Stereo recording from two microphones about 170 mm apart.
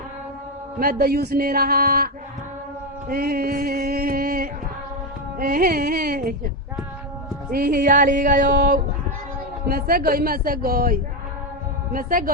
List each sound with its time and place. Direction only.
0.8 s a man's voice: 60° right (ahead or behind)
3.1 s music: 60° right (ahead or behind)
5.4 s a man's voice: 55° right (ahead or behind)
7.5 s music: 60° right (ahead or behind)
9.6 s a man's voice: 60° right (ahead or behind)